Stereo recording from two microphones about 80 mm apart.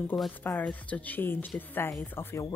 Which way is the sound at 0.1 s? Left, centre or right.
Centre.